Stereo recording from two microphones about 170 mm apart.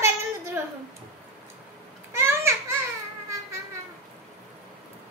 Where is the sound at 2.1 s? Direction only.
15° right (ahead or behind).